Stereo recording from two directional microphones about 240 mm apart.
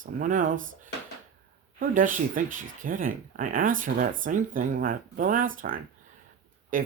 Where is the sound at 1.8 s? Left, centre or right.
Right.